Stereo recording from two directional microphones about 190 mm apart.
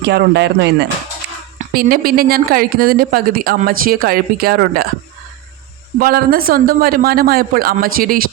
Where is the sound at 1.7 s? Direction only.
50° right (ahead or behind).